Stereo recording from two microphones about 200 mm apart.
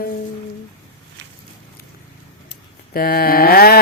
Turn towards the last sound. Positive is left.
turn(degrees=50)  # may be behind; listen again after turning